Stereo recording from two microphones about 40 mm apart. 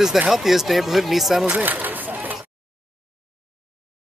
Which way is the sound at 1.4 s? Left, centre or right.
Right.